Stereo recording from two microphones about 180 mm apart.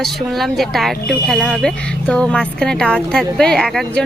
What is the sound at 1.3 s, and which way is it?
A woman's voice, 5° left (ahead or behind).